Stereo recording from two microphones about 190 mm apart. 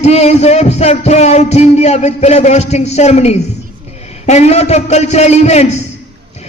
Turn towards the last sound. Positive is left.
turn(degrees=35)  # may be behind; listen again after turning